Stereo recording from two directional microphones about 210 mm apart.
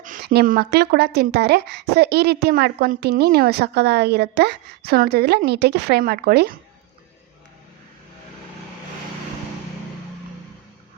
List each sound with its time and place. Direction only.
0.0 s speech: 40° right (ahead or behind)